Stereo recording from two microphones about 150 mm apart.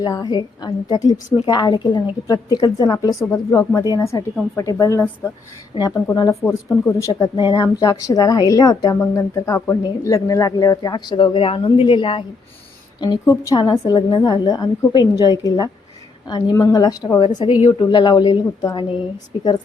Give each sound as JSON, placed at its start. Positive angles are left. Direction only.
{"t": 0.0, "sound": "a woman's voice", "side_deg": 25}